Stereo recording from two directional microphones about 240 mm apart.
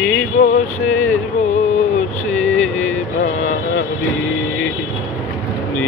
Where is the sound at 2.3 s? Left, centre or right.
Centre.